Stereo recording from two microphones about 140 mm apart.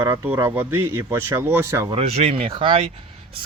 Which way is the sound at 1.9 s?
50° right (ahead or behind).